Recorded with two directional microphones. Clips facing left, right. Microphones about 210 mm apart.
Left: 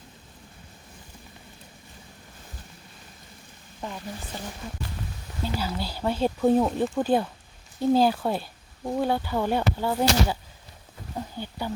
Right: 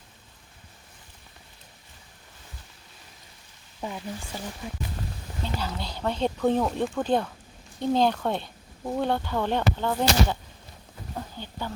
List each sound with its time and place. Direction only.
3.8 s speech: 10° right (ahead or behind)
5.5 s speech: 5° left (ahead or behind)
11.1 s a sound: 10° left (ahead or behind)